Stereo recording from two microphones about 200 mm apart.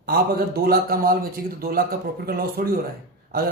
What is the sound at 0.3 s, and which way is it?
Speech, 50° right (ahead or behind).